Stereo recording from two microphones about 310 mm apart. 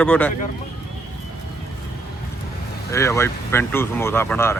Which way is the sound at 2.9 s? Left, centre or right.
Centre.